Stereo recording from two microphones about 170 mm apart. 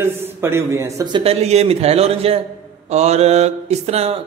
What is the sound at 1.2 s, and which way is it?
A man's voice, 35° right (ahead or behind).